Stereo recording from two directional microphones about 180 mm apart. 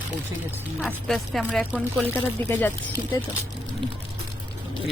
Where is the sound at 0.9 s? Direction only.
Centre (ahead or behind).